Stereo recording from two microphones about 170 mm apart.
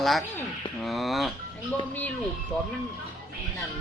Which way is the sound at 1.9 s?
10° left (ahead or behind).